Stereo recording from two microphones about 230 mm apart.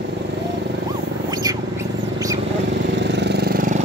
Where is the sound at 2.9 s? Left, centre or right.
Right.